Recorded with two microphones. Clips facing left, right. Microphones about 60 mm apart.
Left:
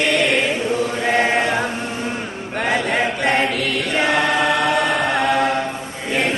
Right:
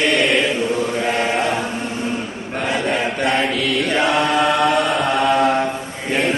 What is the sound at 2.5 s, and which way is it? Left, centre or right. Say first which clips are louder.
Choir: left 2 dB; left.